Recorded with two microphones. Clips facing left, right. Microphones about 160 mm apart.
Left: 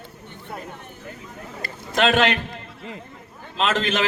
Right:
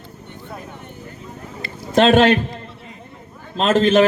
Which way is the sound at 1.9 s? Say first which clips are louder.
Right 7 dB; 35° right (ahead or behind).